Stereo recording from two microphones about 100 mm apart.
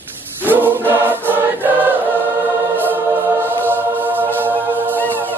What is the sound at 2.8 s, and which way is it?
Music, 20° right (ahead or behind).